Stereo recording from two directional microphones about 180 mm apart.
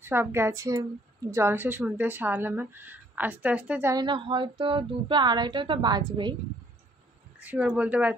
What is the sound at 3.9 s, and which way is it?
Speech, 25° right (ahead or behind).